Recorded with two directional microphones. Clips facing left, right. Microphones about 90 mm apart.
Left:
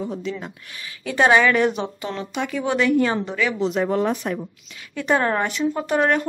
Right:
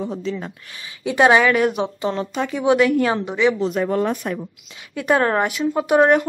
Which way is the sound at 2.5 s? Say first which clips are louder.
Right 3 dB; 10° right (ahead or behind).